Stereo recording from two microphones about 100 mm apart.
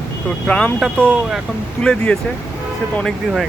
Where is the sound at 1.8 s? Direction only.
10° left (ahead or behind).